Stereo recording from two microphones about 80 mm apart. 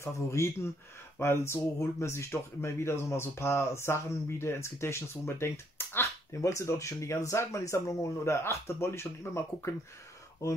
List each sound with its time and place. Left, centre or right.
0.0 s speech: left